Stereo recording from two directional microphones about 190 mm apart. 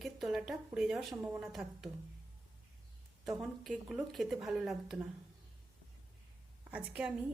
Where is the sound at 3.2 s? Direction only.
Centre (ahead or behind).